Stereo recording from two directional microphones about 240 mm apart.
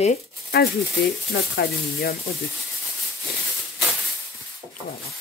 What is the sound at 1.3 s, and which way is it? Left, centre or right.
Speech, left.